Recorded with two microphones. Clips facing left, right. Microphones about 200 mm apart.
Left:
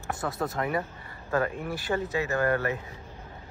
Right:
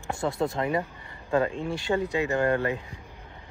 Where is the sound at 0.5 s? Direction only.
20° right (ahead or behind).